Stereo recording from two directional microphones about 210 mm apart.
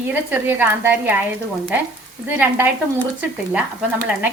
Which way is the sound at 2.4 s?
10° right (ahead or behind).